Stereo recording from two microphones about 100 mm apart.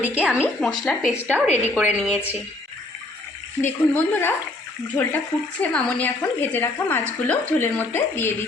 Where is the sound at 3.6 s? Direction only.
20° left (ahead or behind).